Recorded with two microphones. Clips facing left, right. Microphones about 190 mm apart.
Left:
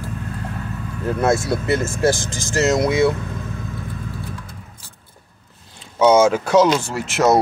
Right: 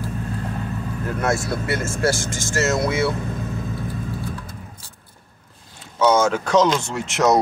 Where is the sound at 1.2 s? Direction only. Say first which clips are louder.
Left 4 dB; 25° left (ahead or behind).